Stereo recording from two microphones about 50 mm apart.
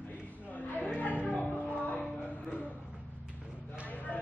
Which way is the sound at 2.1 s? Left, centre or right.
Left.